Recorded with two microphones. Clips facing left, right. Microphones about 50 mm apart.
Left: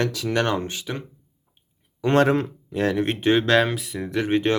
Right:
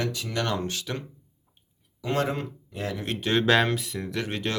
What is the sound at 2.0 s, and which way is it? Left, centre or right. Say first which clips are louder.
Speech: left 8 dB; left.